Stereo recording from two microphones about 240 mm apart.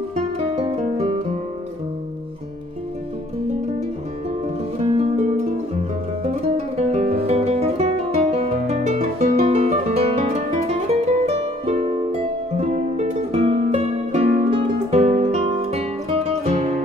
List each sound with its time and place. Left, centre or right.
0.6 s music: right
4.7 s music: right
6.2 s music: right